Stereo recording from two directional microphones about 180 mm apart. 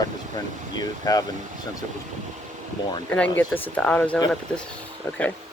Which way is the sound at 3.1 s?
10° left (ahead or behind).